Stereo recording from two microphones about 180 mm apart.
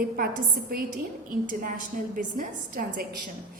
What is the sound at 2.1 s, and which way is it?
A woman's voice, 50° right (ahead or behind).